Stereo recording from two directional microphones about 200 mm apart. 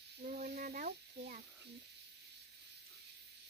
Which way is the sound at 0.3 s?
45° right (ahead or behind).